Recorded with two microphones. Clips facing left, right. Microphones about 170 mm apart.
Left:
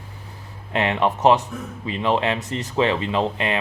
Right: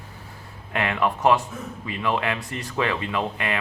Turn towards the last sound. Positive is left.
turn(degrees=25)  # may be behind; listen again after turning